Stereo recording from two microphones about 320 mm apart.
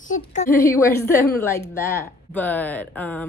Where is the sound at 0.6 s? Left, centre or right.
Centre.